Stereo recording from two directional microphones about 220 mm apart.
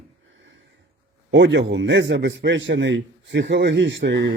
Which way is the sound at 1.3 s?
55° right (ahead or behind).